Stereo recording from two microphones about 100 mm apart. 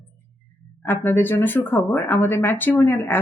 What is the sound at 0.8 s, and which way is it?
Speech, 20° left (ahead or behind).